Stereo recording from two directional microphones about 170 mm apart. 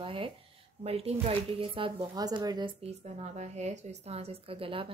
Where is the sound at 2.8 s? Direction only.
40° right (ahead or behind).